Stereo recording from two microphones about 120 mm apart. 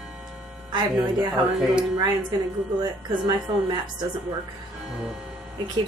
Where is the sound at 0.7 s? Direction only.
35° right (ahead or behind).